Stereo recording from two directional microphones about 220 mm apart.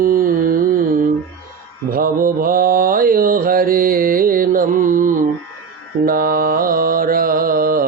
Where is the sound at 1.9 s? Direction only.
40° right (ahead or behind).